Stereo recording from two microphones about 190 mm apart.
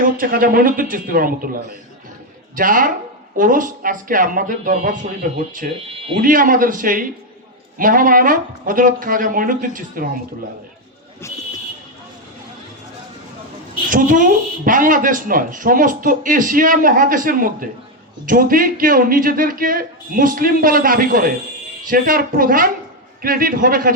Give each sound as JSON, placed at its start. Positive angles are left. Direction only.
{"t": 0.0, "sound": "speech", "side_deg": -45}
{"t": 11.2, "sound": "a sound", "side_deg": 15}
{"t": 13.9, "sound": "speech", "side_deg": -45}